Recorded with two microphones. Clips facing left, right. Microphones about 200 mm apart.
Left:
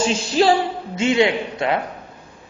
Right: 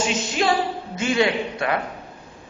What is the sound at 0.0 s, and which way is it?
A man's voice, 30° left (ahead or behind).